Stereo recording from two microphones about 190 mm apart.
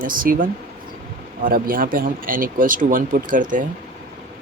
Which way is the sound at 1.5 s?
50° right (ahead or behind).